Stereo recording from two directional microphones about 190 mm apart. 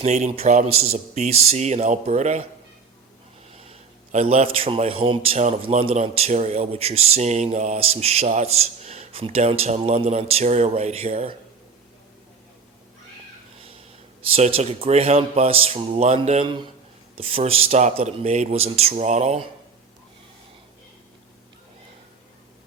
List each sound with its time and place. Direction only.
0.0 s a man's voice: 35° right (ahead or behind)
3.7 s a man's voice: 35° right (ahead or behind)
14.2 s a man's voice: 30° right (ahead or behind)